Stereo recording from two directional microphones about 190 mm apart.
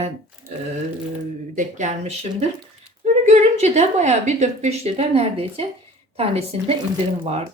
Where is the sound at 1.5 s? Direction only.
40° right (ahead or behind).